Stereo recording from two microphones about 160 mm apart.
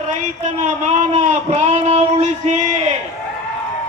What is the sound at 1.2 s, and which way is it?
Speech, 45° right (ahead or behind).